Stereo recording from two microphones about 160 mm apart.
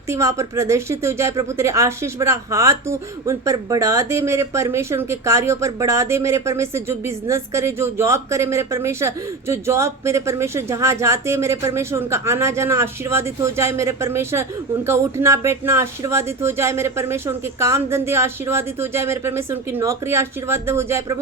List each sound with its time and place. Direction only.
0.1 s speech: 20° right (ahead or behind)